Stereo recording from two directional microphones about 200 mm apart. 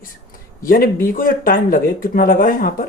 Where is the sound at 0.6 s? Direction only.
45° left (ahead or behind).